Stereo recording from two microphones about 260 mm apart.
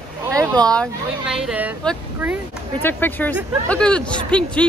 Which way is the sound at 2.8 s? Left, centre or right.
Centre.